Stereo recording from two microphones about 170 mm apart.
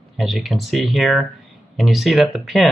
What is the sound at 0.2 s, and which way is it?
Speech, centre (ahead or behind).